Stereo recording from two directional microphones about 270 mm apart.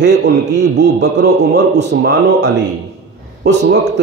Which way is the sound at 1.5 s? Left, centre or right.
Right.